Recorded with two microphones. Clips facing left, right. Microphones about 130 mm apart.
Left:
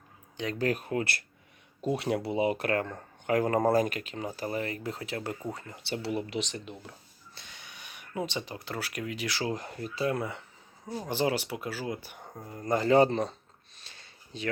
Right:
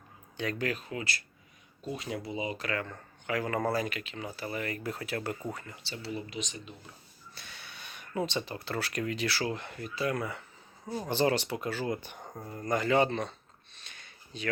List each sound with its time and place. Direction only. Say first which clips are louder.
0.6 s speech: left 5 dB; 50° left (ahead or behind)
1.8 s speech: left 7 dB; 70° left (ahead or behind); by 4.6 s 40° left (ahead or behind)
4.6 s speech: left 1 dB; 25° left (ahead or behind)
5.8 s speech: left 7 dB; 65° left (ahead or behind)
7.3 s speech: right 1 dB; 20° left (ahead or behind)
9.4 s speech: left 1 dB; 35° left (ahead or behind)
10.8 s speech: right 1 dB; 5° right (ahead or behind)
11.1 s speech: right 1 dB; 10° left (ahead or behind)
12.6 s speech: left 4 dB; 30° left (ahead or behind)
13.8 s a sound: even; 30° left (ahead or behind)